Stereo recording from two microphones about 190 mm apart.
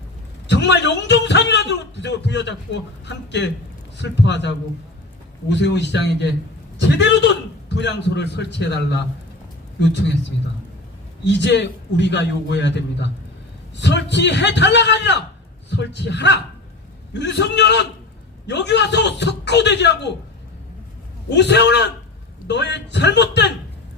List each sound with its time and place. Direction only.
0.4 s a man's voice: 65° left (ahead or behind)
11.2 s a man's voice: 65° left (ahead or behind)
21.2 s a man's voice: 65° left (ahead or behind)